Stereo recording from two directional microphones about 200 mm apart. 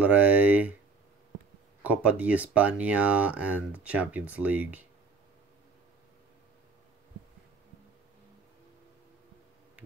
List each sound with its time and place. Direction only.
0.0 s speech: 10° right (ahead or behind)
1.8 s speech: 10° right (ahead or behind)